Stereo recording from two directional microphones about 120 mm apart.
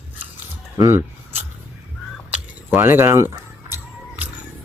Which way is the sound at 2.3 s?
20° right (ahead or behind).